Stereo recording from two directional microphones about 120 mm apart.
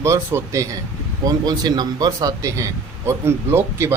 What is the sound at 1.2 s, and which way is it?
Speech, 30° right (ahead or behind).